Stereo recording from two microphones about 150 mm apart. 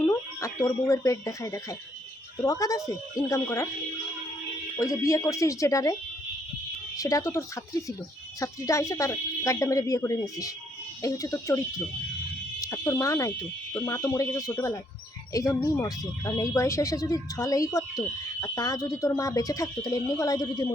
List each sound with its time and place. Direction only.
0.0 s speech: 20° left (ahead or behind)
4.8 s speech: 20° left (ahead or behind)
12.6 s speech: 20° left (ahead or behind)